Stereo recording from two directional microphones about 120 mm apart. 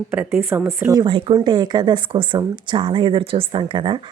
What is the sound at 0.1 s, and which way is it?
Speech, 20° right (ahead or behind).